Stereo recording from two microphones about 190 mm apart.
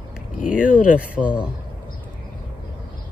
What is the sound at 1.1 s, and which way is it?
Speech, 5° right (ahead or behind).